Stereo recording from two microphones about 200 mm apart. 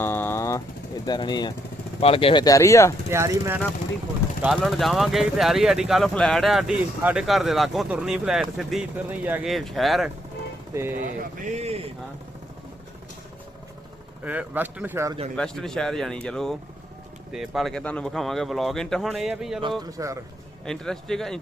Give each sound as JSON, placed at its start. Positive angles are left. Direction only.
{"t": 0.0, "sound": "a sound", "side_deg": 10}
{"t": 1.0, "sound": "speech", "side_deg": 20}
{"t": 3.1, "sound": "a man's voice", "side_deg": -15}
{"t": 4.4, "sound": "speech", "side_deg": 0}
{"t": 11.0, "sound": "speech", "side_deg": -35}
{"t": 14.3, "sound": "a man's voice", "side_deg": -10}
{"t": 15.4, "sound": "speech", "side_deg": 5}
{"t": 19.8, "sound": "a man's voice", "side_deg": -15}
{"t": 20.7, "sound": "speech", "side_deg": 5}